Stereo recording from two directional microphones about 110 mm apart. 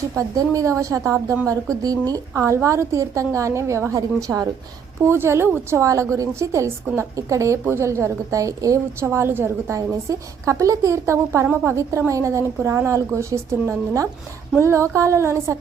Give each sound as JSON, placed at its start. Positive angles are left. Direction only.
{"t": 0.2, "sound": "a woman's voice", "side_deg": -30}